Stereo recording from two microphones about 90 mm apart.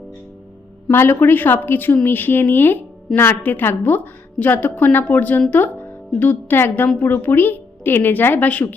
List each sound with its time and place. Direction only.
0.9 s a woman's voice: 25° left (ahead or behind)